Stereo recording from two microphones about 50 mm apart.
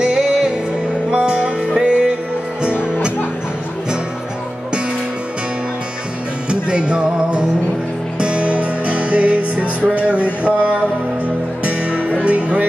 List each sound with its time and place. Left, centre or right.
0.0 s music: centre
6.5 s music: right